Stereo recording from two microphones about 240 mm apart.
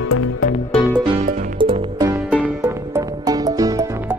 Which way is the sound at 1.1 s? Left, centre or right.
Right.